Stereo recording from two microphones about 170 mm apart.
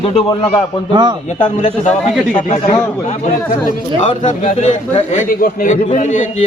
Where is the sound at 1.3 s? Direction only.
45° left (ahead or behind).